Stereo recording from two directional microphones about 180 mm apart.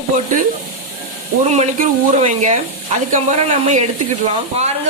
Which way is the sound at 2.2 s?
40° right (ahead or behind).